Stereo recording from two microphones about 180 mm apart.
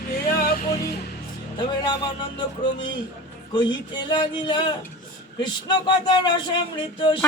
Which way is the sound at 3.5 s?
25° left (ahead or behind).